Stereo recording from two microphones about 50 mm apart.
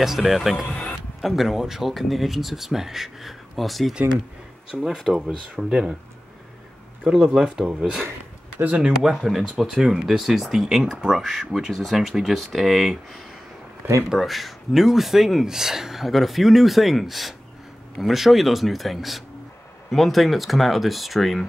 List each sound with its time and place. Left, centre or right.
0.0 s speech: centre
0.7 s a sound: left
1.2 s speech: centre
7.3 s speech: centre
8.6 s speech: right
9.2 s speech: centre